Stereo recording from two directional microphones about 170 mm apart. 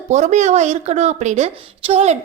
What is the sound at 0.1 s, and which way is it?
A woman's voice, 45° right (ahead or behind).